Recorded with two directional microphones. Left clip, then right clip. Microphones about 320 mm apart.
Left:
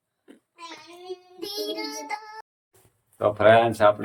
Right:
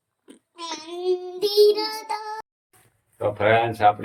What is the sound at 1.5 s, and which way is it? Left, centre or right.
Child singing, right.